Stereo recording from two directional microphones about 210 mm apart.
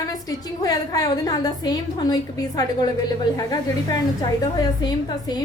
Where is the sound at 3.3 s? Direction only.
20° left (ahead or behind).